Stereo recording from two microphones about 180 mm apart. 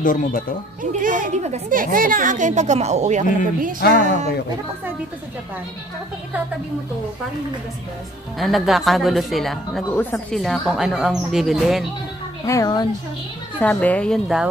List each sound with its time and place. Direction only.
0.0 s speech: 50° left (ahead or behind)
1.0 s a woman's voice: 45° right (ahead or behind)
8.4 s a woman's voice: centre (ahead or behind)
12.4 s a woman's voice: 20° left (ahead or behind)
13.6 s speech: 10° left (ahead or behind)